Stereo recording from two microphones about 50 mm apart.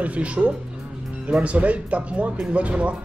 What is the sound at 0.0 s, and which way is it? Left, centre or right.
Speech, right.